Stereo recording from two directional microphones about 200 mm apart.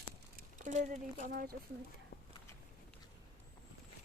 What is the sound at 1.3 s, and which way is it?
Speech, 45° right (ahead or behind).